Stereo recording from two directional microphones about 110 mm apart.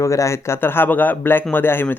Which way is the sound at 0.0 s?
25° left (ahead or behind).